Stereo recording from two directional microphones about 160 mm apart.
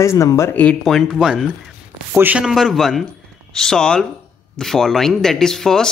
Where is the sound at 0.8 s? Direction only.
Centre (ahead or behind).